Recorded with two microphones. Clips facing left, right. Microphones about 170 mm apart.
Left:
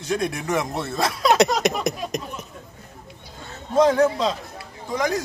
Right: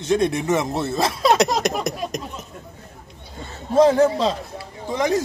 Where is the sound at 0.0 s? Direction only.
25° right (ahead or behind).